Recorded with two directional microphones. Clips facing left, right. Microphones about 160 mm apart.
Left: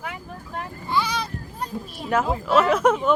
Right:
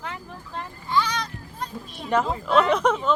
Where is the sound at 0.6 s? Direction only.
10° left (ahead or behind).